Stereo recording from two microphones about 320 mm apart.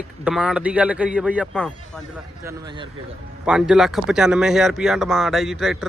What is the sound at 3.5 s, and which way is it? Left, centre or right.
Speech, centre.